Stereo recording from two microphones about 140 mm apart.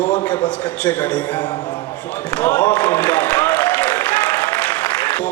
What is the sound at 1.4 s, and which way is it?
Speech, 30° left (ahead or behind).